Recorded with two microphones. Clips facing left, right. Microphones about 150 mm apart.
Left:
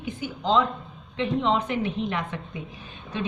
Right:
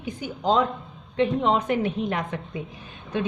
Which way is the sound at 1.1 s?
50° right (ahead or behind).